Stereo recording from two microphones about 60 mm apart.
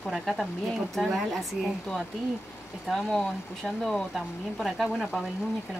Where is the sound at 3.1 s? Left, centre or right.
Centre.